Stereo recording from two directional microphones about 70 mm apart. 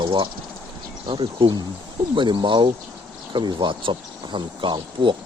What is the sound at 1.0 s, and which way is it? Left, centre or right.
Speech, right.